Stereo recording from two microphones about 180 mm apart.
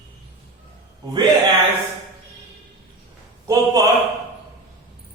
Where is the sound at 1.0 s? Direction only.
25° right (ahead or behind).